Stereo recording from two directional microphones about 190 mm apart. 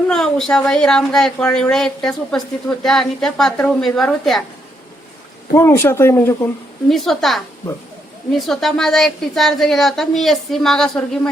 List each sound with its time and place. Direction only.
0.1 s speech: centre (ahead or behind)
5.5 s speech: 15° left (ahead or behind)